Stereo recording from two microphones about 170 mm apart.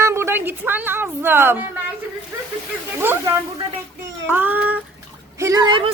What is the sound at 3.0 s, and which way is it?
Speech, 15° right (ahead or behind).